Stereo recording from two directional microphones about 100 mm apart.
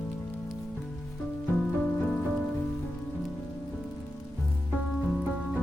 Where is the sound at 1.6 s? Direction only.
10° left (ahead or behind).